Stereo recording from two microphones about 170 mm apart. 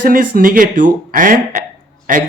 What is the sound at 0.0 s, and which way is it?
Speech, 55° right (ahead or behind).